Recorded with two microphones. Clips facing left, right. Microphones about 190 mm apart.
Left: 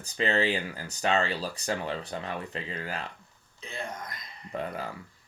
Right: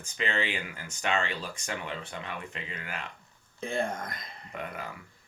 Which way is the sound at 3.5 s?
50° right (ahead or behind).